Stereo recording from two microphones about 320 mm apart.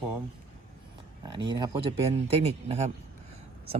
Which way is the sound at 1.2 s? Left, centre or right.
Centre.